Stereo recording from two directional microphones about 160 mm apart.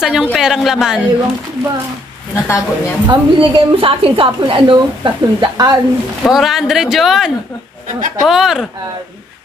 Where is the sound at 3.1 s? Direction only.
30° right (ahead or behind).